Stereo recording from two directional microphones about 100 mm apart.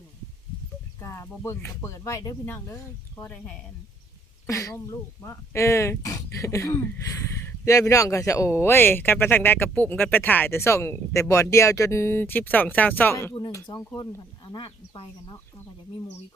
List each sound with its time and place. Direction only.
0.9 s a woman's voice: 30° left (ahead or behind); by 3.5 s 15° left (ahead or behind)
4.4 s a woman's voice: 35° left (ahead or behind)
13.5 s speech: 35° left (ahead or behind)
14.4 s speech: 50° left (ahead or behind)